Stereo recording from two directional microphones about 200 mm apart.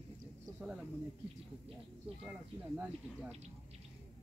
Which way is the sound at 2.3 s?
5° right (ahead or behind).